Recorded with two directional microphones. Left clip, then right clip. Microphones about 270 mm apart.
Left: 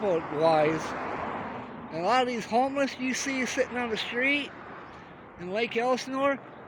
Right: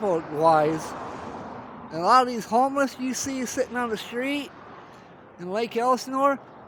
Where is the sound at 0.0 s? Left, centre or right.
Right.